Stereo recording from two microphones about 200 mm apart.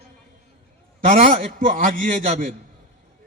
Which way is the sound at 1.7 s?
40° right (ahead or behind).